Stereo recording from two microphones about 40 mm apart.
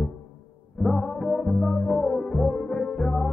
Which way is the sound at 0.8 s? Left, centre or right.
Centre.